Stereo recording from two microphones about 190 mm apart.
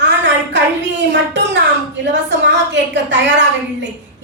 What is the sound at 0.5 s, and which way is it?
A woman's voice, 70° right (ahead or behind).